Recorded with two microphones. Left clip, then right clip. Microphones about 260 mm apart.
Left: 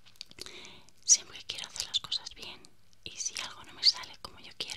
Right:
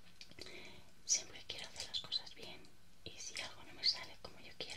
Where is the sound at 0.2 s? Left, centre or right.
Left.